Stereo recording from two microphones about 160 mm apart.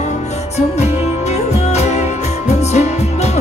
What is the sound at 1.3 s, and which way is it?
Music, 45° left (ahead or behind).